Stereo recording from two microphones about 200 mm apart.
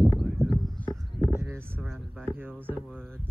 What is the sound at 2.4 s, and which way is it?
Speech, 10° right (ahead or behind).